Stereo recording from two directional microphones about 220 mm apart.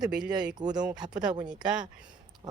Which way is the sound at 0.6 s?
20° right (ahead or behind).